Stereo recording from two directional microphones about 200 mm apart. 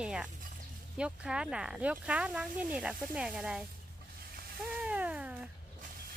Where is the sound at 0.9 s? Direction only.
5° right (ahead or behind).